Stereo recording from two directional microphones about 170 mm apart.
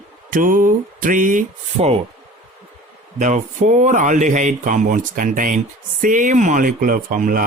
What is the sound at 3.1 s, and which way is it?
Speech, 45° right (ahead or behind).